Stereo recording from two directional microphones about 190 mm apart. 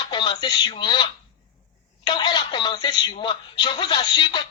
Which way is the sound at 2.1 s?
25° left (ahead or behind).